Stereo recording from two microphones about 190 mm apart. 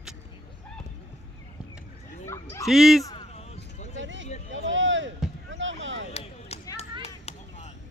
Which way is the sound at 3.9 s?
75° right (ahead or behind).